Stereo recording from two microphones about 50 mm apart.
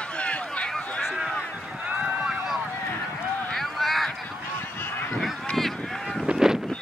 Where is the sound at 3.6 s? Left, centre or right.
Centre.